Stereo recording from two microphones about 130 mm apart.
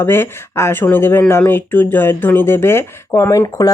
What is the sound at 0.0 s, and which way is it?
Speech, 15° left (ahead or behind).